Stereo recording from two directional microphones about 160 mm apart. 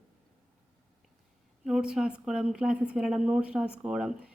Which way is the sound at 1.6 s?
5° right (ahead or behind).